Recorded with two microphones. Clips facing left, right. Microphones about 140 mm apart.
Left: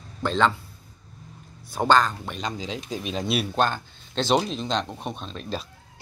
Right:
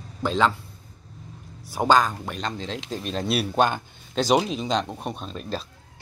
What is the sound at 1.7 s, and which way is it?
Speech, 10° right (ahead or behind).